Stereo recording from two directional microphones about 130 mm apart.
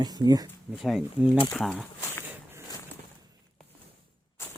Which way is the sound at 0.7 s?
Centre (ahead or behind).